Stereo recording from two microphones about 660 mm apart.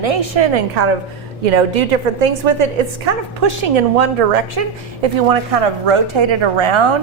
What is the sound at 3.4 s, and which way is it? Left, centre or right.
A woman's voice, right.